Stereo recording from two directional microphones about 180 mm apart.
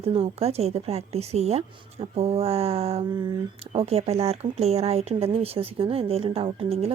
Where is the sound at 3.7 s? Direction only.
35° right (ahead or behind).